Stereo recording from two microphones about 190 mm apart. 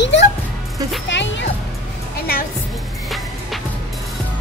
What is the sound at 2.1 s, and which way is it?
Music, 55° left (ahead or behind).